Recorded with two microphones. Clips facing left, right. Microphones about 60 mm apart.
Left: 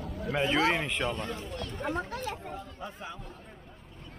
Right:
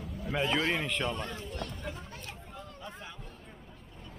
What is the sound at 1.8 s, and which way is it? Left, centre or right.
Speech, left.